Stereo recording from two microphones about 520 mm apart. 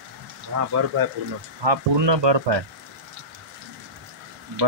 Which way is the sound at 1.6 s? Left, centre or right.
Right.